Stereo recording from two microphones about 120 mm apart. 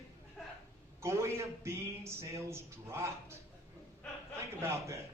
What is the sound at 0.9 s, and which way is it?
A man's voice, 25° right (ahead or behind).